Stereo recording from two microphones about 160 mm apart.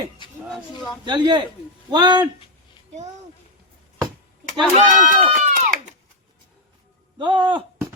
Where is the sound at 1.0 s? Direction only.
30° right (ahead or behind).